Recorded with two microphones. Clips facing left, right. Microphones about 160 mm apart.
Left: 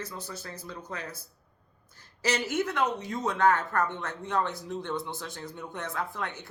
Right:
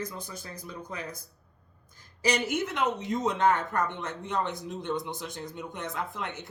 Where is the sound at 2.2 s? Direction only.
15° right (ahead or behind).